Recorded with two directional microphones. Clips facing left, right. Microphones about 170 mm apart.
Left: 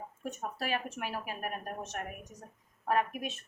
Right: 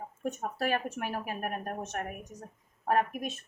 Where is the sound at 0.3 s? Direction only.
45° right (ahead or behind).